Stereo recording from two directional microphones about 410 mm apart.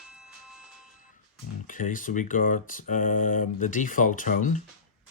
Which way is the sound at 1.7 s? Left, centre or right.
Centre.